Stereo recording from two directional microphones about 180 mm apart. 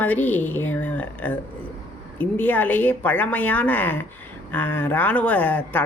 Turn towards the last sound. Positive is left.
turn(degrees=10)  # may be behind; listen again after turning